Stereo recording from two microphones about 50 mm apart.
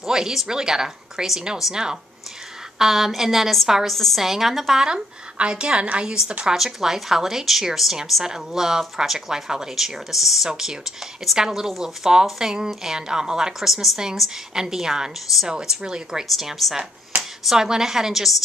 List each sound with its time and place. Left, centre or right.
0.0 s a woman's voice: centre
4.2 s speech: centre
4.8 s a woman's voice: centre
6.4 s speech: centre
16.3 s a woman's voice: centre